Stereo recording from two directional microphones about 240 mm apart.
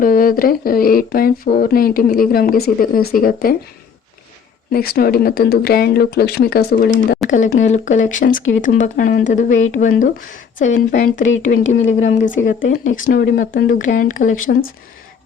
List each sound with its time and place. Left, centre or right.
0.0 s speech: left
4.7 s speech: left